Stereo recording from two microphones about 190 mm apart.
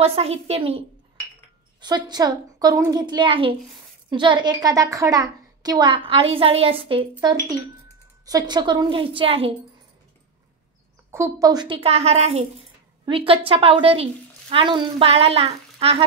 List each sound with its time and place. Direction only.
0.0 s a woman's voice: 30° right (ahead or behind)
11.1 s a woman's voice: 15° right (ahead or behind); by 16.0 s 30° right (ahead or behind)